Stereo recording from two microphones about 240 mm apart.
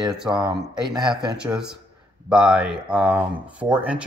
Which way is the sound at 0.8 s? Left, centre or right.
Centre.